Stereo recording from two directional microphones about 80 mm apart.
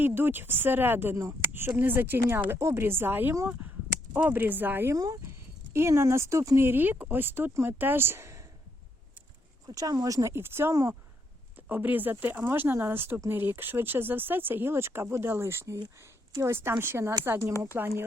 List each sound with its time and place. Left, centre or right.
0.0 s speech: right
4.9 s speech: right
5.7 s speech: right
6.6 s speech: right
9.6 s speech: right